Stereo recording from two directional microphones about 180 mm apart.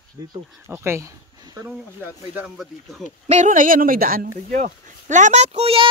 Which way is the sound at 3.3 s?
45° right (ahead or behind).